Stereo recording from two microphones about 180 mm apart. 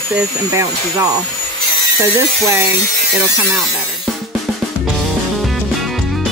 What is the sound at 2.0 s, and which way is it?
Speech, 15° right (ahead or behind).